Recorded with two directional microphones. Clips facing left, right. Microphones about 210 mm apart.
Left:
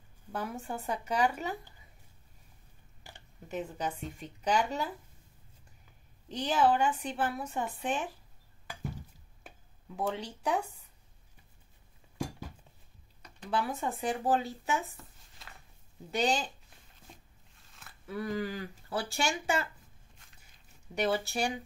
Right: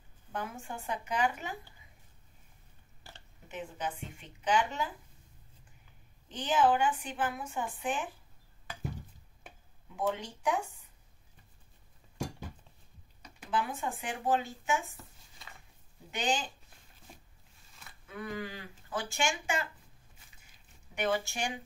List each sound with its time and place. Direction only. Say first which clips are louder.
0.3 s a woman's voice: left 3 dB; 35° left (ahead or behind)
3.1 s a sound: left 1 dB; 15° left (ahead or behind)
3.4 s a woman's voice: left 3 dB; 40° left (ahead or behind)
6.2 s a woman's voice: even; 40° left (ahead or behind)
10.1 s a woman's voice: left 1 dB; 35° left (ahead or behind)
13.5 s a woman's voice: left 1 dB; 35° left (ahead or behind)
16.1 s a woman's voice: left 3 dB; 35° left (ahead or behind)
18.0 s a woman's voice: left 5 dB; 35° left (ahead or behind)
20.2 s biting: even; 5° right (ahead or behind)
20.9 s a woman's voice: left 2 dB; 35° left (ahead or behind)